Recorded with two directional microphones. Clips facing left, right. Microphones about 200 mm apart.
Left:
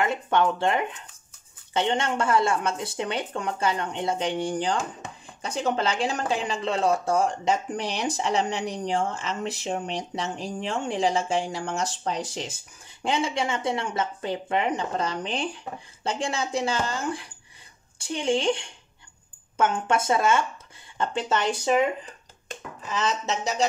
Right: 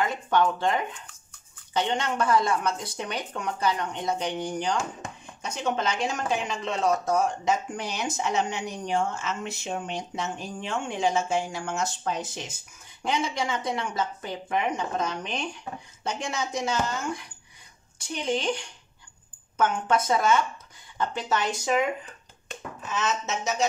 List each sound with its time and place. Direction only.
0.0 s speech: 25° left (ahead or behind)
22.9 s speech: 35° left (ahead or behind)